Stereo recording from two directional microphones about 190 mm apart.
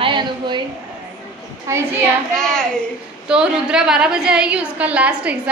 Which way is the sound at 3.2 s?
5° right (ahead or behind).